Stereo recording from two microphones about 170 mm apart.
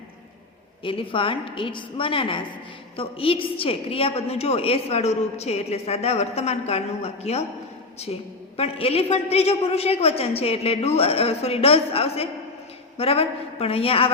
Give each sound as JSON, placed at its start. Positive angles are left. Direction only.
{"t": 0.9, "sound": "a woman's voice", "side_deg": 30}